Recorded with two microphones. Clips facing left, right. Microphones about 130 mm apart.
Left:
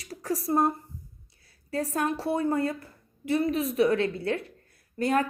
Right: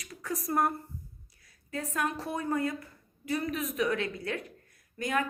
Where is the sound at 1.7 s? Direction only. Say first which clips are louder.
Left 5 dB; 35° left (ahead or behind).